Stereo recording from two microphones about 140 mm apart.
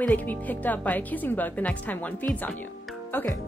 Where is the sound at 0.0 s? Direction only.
10° left (ahead or behind).